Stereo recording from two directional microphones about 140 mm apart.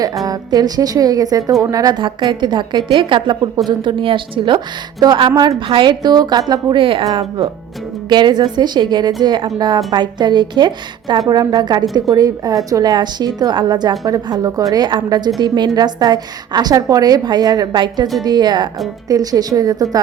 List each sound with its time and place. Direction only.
0.3 s a woman's voice: 25° right (ahead or behind)